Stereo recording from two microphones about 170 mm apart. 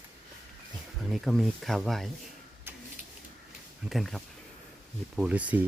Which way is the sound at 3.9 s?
Centre (ahead or behind).